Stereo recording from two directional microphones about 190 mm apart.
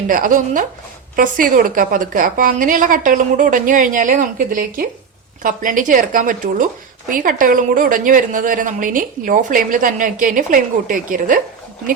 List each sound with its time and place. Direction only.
0.1 s a woman's voice: 45° right (ahead or behind)